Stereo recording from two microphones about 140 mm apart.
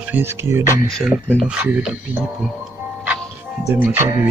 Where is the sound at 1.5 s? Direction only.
5° right (ahead or behind).